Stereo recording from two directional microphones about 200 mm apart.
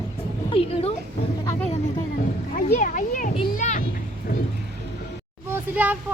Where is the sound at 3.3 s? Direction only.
35° left (ahead or behind).